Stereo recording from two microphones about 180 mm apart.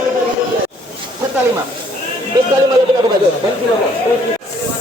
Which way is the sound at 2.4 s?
20° right (ahead or behind).